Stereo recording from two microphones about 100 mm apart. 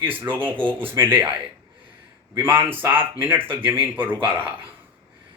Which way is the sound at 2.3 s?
20° right (ahead or behind).